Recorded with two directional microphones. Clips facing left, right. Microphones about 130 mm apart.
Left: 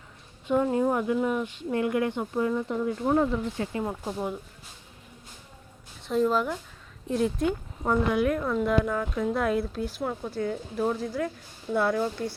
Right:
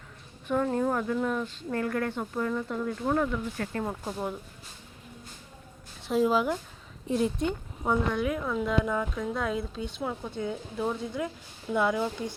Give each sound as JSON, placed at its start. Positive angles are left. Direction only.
{"t": 0.4, "sound": "speech", "side_deg": 10}
{"t": 3.2, "sound": "speech", "side_deg": 30}
{"t": 3.6, "sound": "speech", "side_deg": 10}
{"t": 6.0, "sound": "speech", "side_deg": -5}
{"t": 12.2, "sound": "speech", "side_deg": 60}